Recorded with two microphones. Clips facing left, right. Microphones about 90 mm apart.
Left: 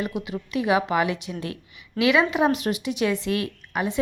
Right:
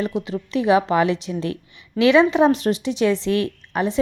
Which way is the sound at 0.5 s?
30° right (ahead or behind).